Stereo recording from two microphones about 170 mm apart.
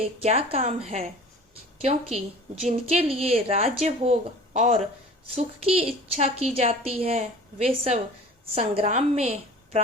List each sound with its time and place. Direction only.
0.0 s a woman's voice: 35° right (ahead or behind)